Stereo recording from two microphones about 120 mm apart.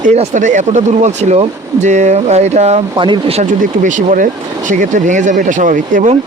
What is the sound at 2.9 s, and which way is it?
Speech, 45° right (ahead or behind).